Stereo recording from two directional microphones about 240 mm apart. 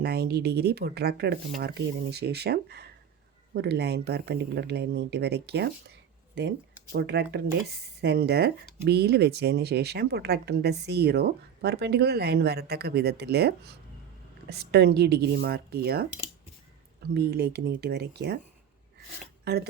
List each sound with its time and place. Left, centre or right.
0.0 s speech: right
6.9 s speech: right
14.5 s speech: right
17.2 s speech: right